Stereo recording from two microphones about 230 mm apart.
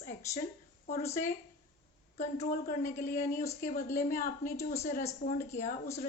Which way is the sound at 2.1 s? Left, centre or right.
Left.